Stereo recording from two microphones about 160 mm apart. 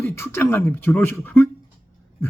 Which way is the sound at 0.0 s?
15° left (ahead or behind).